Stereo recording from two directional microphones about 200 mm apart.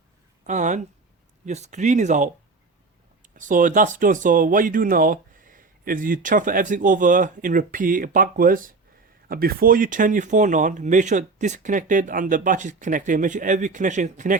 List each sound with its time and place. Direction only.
0.4 s speech: 35° right (ahead or behind)
3.3 s speech: 40° right (ahead or behind)